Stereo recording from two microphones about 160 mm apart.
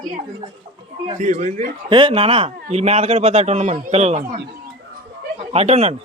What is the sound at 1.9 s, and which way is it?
Speech, 35° right (ahead or behind).